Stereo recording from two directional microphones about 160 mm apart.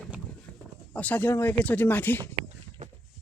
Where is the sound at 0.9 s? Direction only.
10° left (ahead or behind).